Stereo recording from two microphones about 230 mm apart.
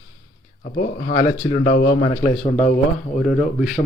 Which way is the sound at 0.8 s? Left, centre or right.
Left.